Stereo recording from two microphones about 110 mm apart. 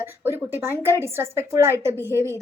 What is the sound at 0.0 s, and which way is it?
A woman's voice, 20° right (ahead or behind).